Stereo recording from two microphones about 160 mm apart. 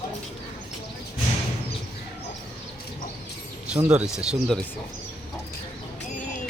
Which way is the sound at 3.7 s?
5° right (ahead or behind).